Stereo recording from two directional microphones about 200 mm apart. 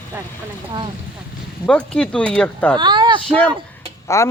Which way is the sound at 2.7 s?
20° right (ahead or behind).